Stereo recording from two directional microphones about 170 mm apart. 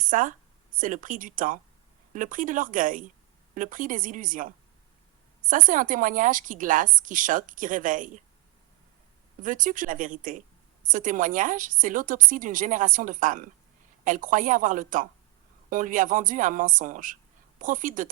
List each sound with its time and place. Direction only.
0.0 s a woman's voice: 50° right (ahead or behind)
9.4 s a woman's voice: 50° right (ahead or behind)